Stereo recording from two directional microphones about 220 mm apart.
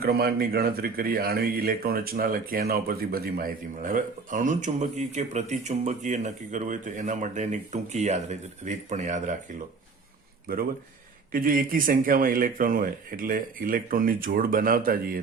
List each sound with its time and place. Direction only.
0.0 s a man's voice: 45° right (ahead or behind)
11.3 s a man's voice: 40° right (ahead or behind)